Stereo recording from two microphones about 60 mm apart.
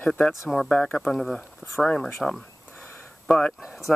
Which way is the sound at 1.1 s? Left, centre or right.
Centre.